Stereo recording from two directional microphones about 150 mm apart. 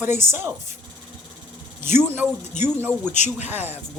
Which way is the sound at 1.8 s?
15° right (ahead or behind).